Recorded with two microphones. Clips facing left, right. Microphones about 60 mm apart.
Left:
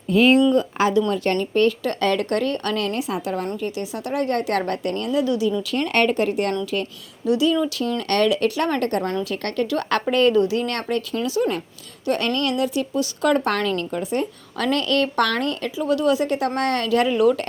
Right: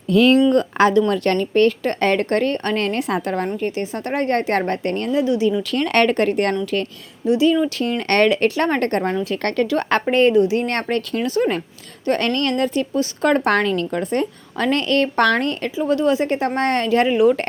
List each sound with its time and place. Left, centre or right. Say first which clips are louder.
0.1 s speech: right 2 dB; right
0.5 s a woman's voice: right 3 dB; right
5.1 s a woman's voice: right 2 dB; right
5.5 s speech: right 3 dB; right
7.3 s a woman's voice: right 3 dB; right
9.6 s a woman's voice: right 3 dB; right
10.6 s a woman's voice: right 3 dB; right
10.8 s a woman's voice: right 2 dB; right
13.9 s a woman's voice: right 3 dB; right
14.6 s a woman's voice: right 2 dB; right